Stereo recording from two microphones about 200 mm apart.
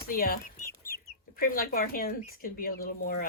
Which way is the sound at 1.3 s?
45° left (ahead or behind).